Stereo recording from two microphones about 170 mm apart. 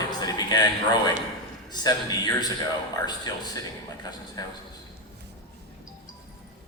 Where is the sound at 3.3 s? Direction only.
25° left (ahead or behind).